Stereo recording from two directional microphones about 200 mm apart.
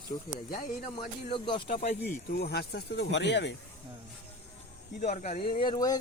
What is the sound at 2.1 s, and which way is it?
Speech, 50° left (ahead or behind).